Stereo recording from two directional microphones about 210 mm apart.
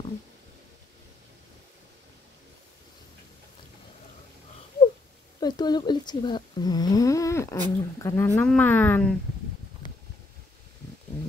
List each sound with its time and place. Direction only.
5.4 s speech: 20° left (ahead or behind)